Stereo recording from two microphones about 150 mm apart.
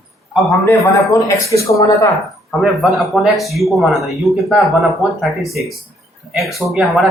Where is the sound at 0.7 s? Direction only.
20° left (ahead or behind).